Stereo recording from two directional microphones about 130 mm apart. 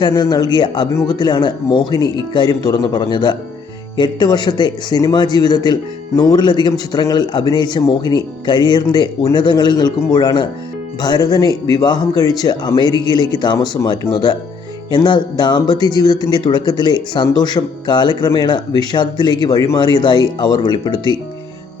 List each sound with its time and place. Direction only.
0.0 s speech: 35° left (ahead or behind)